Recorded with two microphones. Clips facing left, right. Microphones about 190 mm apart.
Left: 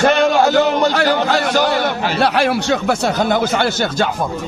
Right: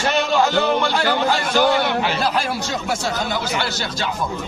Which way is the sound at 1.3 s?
70° left (ahead or behind).